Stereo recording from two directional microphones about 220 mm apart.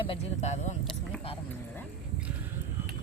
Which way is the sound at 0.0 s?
25° left (ahead or behind).